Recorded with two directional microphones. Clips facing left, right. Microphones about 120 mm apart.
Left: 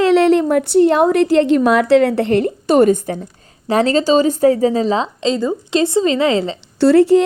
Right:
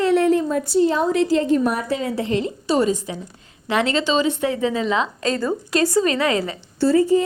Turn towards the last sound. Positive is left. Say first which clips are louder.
# left 6 dB
turn(degrees=75)  # may be behind; listen again after turning